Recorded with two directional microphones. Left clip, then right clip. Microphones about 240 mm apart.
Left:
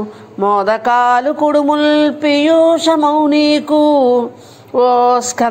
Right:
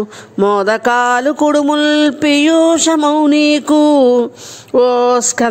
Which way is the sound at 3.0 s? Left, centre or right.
Right.